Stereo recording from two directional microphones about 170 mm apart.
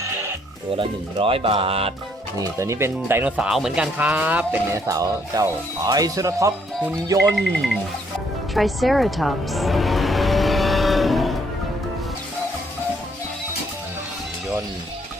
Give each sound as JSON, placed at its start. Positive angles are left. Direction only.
{"t": 0.8, "sound": "speech", "side_deg": -30}
{"t": 2.4, "sound": "speech", "side_deg": -15}
{"t": 7.5, "sound": "speech", "side_deg": 0}
{"t": 8.5, "sound": "music", "side_deg": 0}